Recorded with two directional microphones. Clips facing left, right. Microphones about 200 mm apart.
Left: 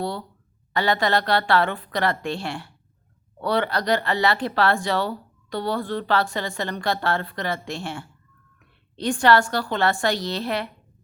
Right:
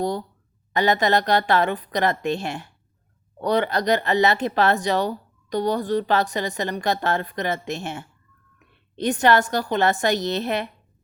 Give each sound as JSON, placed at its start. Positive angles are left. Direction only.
{"t": 0.0, "sound": "a woman's voice", "side_deg": -15}